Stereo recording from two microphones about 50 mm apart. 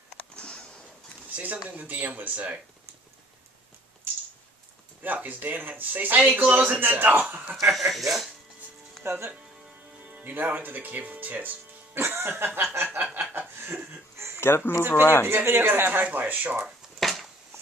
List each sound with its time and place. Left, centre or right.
1.3 s speech: right
5.0 s speech: right
7.5 s speech: centre
9.0 s speech: right
10.2 s speech: right
11.9 s music: right
12.7 s a sound: right
14.4 s speech: left
15.3 s speech: right
17.0 s a sound: centre